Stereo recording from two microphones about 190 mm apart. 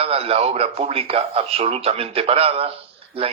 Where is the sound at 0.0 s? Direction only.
30° right (ahead or behind).